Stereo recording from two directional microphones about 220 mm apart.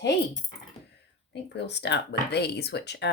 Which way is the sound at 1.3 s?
50° left (ahead or behind).